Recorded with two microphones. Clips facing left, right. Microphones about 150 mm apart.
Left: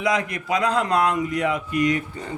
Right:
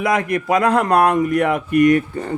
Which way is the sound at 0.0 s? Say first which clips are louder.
Right 5 dB; 55° right (ahead or behind).